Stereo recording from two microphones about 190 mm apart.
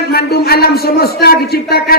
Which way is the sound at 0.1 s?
55° left (ahead or behind).